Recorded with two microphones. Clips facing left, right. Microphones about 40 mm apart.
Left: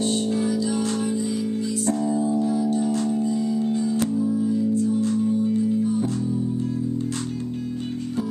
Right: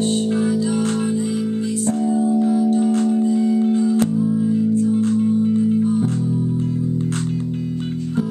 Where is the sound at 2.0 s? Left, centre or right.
Centre.